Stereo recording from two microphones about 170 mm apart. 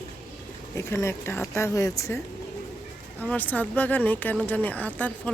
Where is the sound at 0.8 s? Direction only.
15° left (ahead or behind).